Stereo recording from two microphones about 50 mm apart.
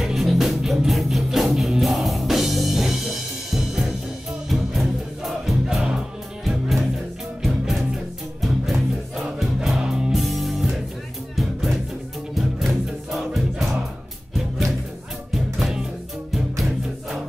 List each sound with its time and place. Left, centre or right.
0.0 s music: centre
10.1 s music: centre
16.3 s music: centre